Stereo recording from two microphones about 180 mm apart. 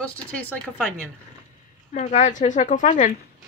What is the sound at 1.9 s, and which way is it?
A woman's voice, 40° left (ahead or behind).